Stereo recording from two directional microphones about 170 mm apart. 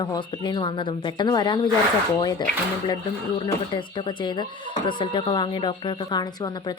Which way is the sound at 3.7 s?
25° left (ahead or behind).